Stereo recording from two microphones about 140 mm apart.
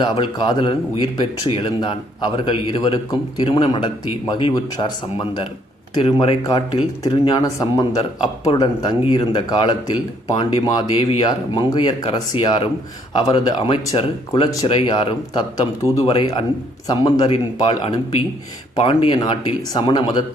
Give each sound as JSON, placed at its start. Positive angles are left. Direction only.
{"t": 0.0, "sound": "speech", "side_deg": 35}
{"t": 6.4, "sound": "speech", "side_deg": 25}
{"t": 14.4, "sound": "speech", "side_deg": 25}
{"t": 14.7, "sound": "speech", "side_deg": 40}
{"t": 16.8, "sound": "speech", "side_deg": 30}
{"t": 17.2, "sound": "speech", "side_deg": 45}